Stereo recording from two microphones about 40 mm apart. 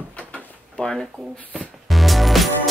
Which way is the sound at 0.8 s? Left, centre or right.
Left.